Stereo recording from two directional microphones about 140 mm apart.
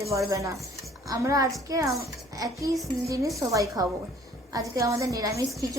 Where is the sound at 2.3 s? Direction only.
25° right (ahead or behind).